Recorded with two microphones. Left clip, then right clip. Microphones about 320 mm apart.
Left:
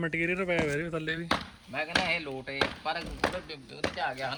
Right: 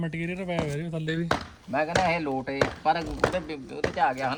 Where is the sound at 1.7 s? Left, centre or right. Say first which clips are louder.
Right 5 dB; centre.